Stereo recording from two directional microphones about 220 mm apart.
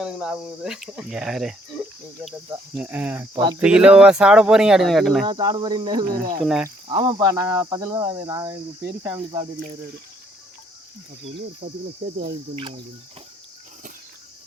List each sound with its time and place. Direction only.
0.0 s speech: 5° right (ahead or behind)
5.2 s speech: 20° right (ahead or behind)
6.1 s speech: 40° right (ahead or behind)
6.4 s speech: centre (ahead or behind)
6.8 s speech: 20° right (ahead or behind)
11.6 s speech: 40° right (ahead or behind)
12.1 s speech: 25° right (ahead or behind)